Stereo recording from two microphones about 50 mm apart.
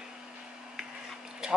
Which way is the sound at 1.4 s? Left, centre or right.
Centre.